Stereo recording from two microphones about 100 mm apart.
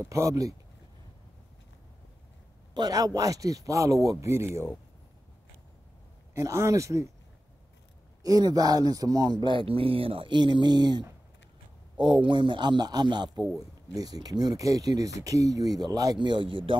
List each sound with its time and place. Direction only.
0.0 s speech: 30° right (ahead or behind)
2.7 s speech: 40° right (ahead or behind)
6.3 s speech: 30° right (ahead or behind)
8.2 s speech: 40° right (ahead or behind)
16.2 s speech: 50° right (ahead or behind)